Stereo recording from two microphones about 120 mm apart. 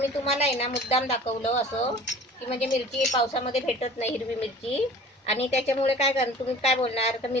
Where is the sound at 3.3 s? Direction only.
55° left (ahead or behind).